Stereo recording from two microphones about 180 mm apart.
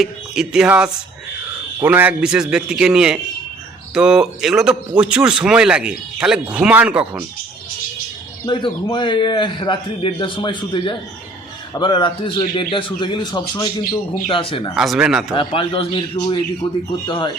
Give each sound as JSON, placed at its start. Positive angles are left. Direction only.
{"t": 0.0, "sound": "a man's voice", "side_deg": -5}
{"t": 8.4, "sound": "a man's voice", "side_deg": 25}
{"t": 14.8, "sound": "a man's voice", "side_deg": -5}
{"t": 15.4, "sound": "a man's voice", "side_deg": 30}